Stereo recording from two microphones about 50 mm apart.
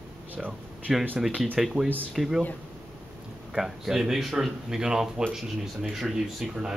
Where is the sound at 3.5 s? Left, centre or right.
Centre.